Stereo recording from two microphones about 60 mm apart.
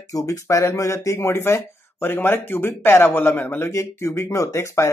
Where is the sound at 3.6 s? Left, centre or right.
Left.